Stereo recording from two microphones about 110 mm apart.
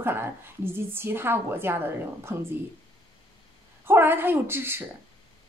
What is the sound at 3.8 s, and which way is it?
A woman's voice, 20° right (ahead or behind).